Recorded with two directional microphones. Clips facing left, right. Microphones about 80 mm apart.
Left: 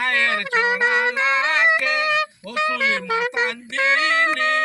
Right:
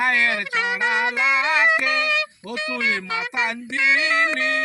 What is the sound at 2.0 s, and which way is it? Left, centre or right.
Music, left.